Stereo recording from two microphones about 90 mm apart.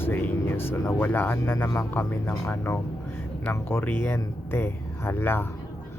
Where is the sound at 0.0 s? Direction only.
25° left (ahead or behind).